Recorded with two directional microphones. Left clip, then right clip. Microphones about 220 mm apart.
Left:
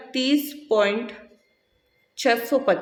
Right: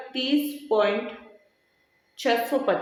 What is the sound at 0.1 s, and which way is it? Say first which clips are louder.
Speech: left 3 dB; 40° left (ahead or behind).